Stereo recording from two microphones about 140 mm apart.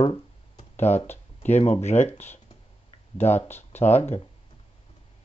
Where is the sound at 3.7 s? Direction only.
50° left (ahead or behind).